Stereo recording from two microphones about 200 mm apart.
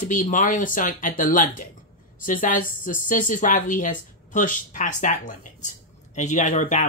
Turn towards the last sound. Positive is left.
turn(degrees=40)  # may be behind; listen again after turning